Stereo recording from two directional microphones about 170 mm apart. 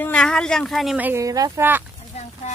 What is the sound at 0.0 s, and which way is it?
Speech, 5° left (ahead or behind).